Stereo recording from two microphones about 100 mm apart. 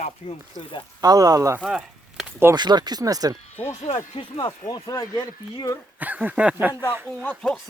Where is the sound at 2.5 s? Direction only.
45° right (ahead or behind).